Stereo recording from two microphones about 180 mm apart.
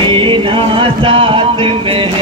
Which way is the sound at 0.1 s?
30° right (ahead or behind).